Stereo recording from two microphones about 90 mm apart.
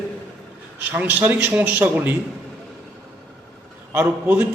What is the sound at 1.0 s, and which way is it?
A man's voice, 20° right (ahead or behind).